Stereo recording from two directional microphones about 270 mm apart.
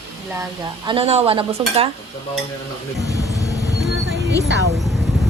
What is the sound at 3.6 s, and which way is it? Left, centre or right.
Vehicle, right.